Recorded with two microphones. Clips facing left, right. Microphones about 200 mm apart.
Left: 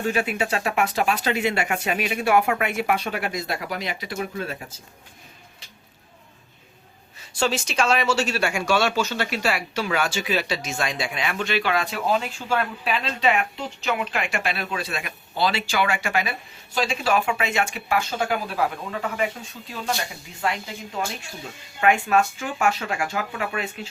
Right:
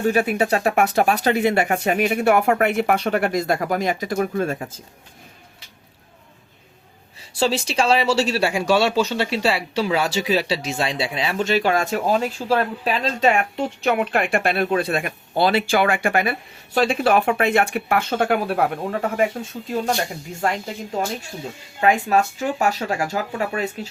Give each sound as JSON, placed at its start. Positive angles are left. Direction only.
{"t": 0.1, "sound": "speech", "side_deg": -40}
{"t": 7.2, "sound": "speech", "side_deg": -30}